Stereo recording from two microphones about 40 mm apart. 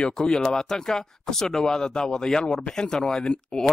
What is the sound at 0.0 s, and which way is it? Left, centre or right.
Speech, centre.